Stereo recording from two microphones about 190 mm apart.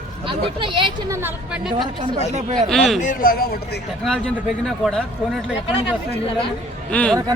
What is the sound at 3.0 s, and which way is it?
Speech, 45° left (ahead or behind).